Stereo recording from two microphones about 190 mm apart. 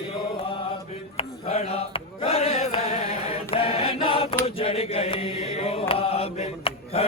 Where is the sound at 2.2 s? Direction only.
30° left (ahead or behind).